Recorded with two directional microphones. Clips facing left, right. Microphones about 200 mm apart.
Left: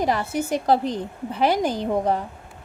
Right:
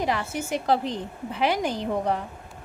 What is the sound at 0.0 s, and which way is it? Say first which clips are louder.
A woman's voice: left 4 dB; 40° left (ahead or behind).